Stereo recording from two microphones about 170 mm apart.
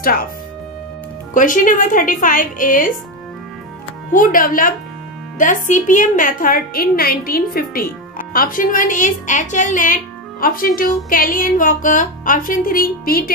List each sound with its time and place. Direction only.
0.0 s speech: 60° left (ahead or behind)
1.3 s a woman's voice: 50° left (ahead or behind)
4.1 s a woman's voice: 55° left (ahead or behind)